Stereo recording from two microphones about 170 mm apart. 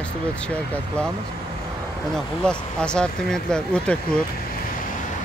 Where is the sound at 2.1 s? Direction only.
5° left (ahead or behind).